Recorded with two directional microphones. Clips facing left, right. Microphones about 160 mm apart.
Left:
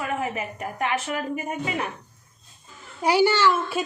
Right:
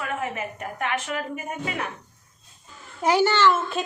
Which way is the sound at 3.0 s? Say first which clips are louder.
Even; 10° left (ahead or behind).